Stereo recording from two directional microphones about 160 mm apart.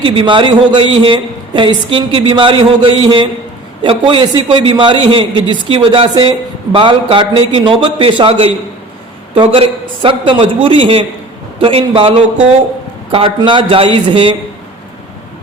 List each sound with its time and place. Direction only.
0.0 s a woman's voice: 30° right (ahead or behind)